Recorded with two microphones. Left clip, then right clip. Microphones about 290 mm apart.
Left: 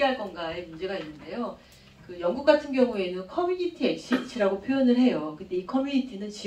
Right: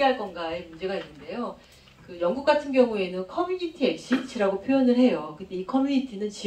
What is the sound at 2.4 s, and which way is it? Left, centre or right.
Speech, right.